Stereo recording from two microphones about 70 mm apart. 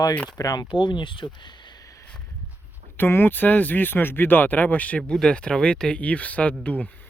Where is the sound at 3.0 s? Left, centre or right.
Left.